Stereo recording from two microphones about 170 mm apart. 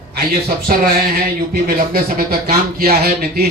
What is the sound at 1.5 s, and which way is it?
Speech, 65° right (ahead or behind).